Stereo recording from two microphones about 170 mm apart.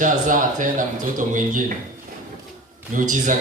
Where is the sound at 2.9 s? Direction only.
50° right (ahead or behind).